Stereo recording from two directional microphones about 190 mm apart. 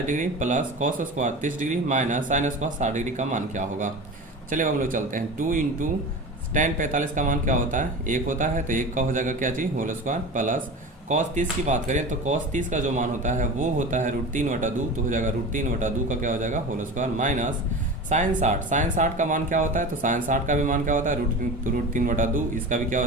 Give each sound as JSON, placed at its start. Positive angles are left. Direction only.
{"t": 0.0, "sound": "speech", "side_deg": -40}